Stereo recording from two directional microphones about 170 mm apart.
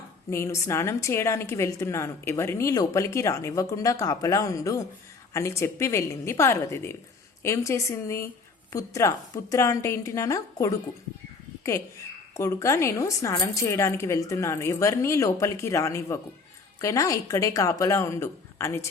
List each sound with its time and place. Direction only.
0.3 s a woman's voice: 15° left (ahead or behind)
12.3 s a woman's voice: 15° left (ahead or behind)